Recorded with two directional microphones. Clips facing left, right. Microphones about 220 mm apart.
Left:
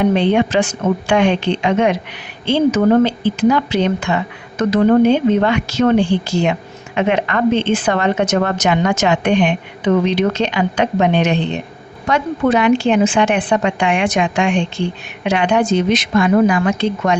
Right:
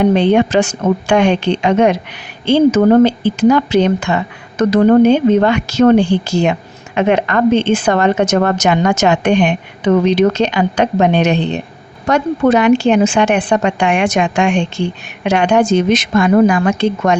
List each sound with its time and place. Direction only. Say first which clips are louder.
0.2 s a woman's voice: right 3 dB; 40° right (ahead or behind)